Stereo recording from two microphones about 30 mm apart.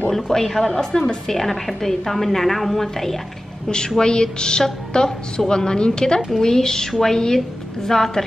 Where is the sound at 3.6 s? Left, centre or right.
Left.